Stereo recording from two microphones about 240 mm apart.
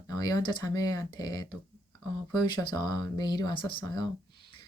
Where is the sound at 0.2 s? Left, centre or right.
Centre.